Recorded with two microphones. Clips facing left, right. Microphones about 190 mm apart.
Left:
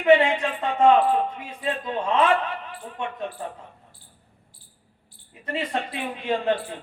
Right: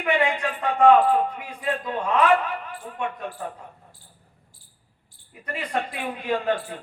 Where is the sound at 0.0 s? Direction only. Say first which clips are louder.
Left 5 dB; 25° left (ahead or behind).